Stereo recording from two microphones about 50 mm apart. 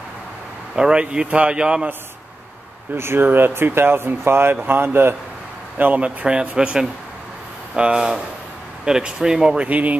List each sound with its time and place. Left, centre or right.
0.7 s a man's voice: centre
3.0 s speech: right
6.0 s a man's voice: right
9.6 s speech: right